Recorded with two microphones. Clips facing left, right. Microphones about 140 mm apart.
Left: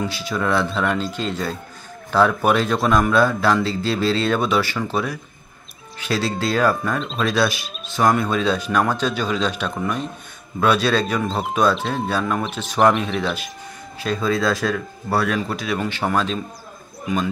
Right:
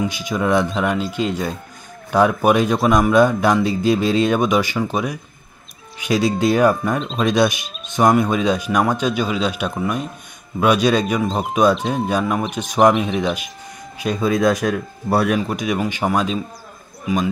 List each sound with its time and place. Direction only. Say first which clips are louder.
0.0 s speech: right 3 dB; 15° right (ahead or behind)
7.0 s speech: right 2 dB; centre (ahead or behind)
7.2 s speech: right 4 dB; 20° right (ahead or behind)